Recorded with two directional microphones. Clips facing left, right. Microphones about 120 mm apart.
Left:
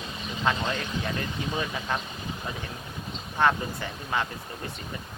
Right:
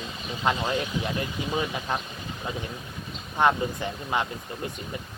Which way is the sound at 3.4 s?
15° right (ahead or behind).